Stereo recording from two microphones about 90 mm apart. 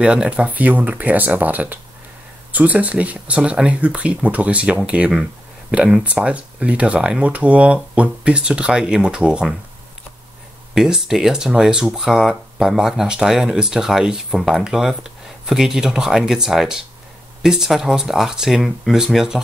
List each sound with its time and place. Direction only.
0.0 s speech: 10° right (ahead or behind)
10.7 s speech: 5° right (ahead or behind)